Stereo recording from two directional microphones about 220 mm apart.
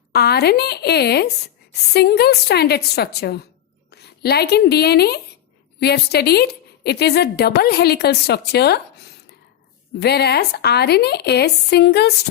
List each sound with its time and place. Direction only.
0.1 s a woman's voice: 45° left (ahead or behind)
10.0 s a woman's voice: 50° left (ahead or behind)